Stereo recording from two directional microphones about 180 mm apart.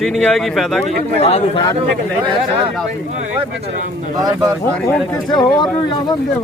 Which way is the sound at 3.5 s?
65° right (ahead or behind).